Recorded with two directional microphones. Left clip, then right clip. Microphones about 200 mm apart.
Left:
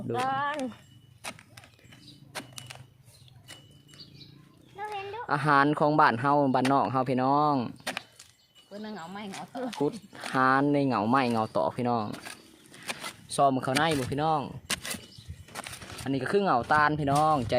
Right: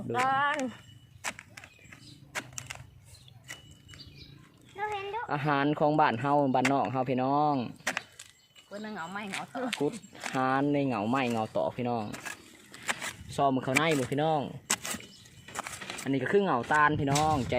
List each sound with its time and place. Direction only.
0.1 s speech: 5° left (ahead or behind)
4.8 s a woman's voice: 5° left (ahead or behind)
8.7 s speech: 5° left (ahead or behind); by 12.1 s 20° left (ahead or behind)
13.3 s speech: 15° left (ahead or behind)
16.0 s speech: 10° left (ahead or behind)